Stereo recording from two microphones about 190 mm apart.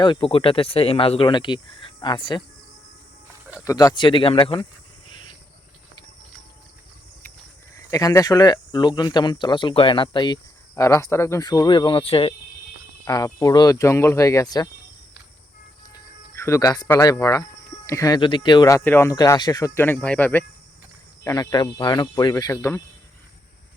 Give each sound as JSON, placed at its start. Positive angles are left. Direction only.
{"t": 0.0, "sound": "speech", "side_deg": 25}
{"t": 3.6, "sound": "speech", "side_deg": 15}
{"t": 5.0, "sound": "cricket", "side_deg": 25}
{"t": 7.9, "sound": "speech", "side_deg": 15}
{"t": 13.1, "sound": "speech", "side_deg": 20}
{"t": 16.3, "sound": "speech", "side_deg": 15}